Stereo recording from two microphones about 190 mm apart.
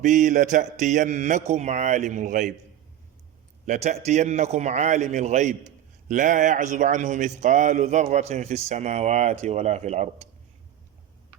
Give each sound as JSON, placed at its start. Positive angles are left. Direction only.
{"t": 0.0, "sound": "speech", "side_deg": -40}
{"t": 3.7, "sound": "speech", "side_deg": -35}